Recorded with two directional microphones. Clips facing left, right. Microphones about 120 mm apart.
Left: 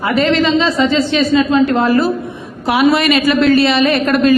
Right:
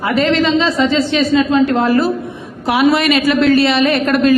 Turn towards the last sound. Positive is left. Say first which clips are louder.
# left 1 dB
turn(degrees=15)  # may be behind; listen again after turning